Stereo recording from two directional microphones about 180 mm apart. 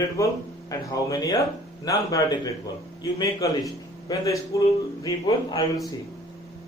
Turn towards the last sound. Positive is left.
turn(degrees=20)  # may be behind; listen again after turning